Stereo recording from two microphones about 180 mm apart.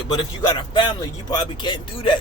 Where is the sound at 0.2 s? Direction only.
25° left (ahead or behind).